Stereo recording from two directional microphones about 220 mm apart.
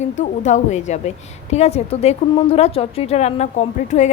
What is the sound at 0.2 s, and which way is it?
A woman's voice, 35° left (ahead or behind).